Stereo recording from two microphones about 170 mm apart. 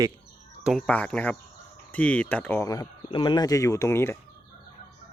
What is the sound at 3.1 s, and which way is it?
Crowing, 25° left (ahead or behind).